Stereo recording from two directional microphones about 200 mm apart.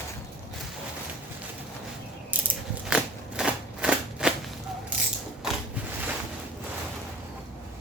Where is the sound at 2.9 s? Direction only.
5° right (ahead or behind).